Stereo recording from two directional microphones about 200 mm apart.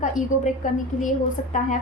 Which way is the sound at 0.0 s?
40° left (ahead or behind).